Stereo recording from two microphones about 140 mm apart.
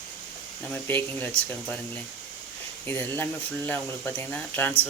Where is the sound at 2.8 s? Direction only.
15° left (ahead or behind).